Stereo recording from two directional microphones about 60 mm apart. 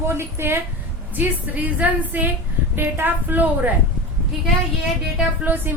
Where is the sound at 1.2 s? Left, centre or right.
Right.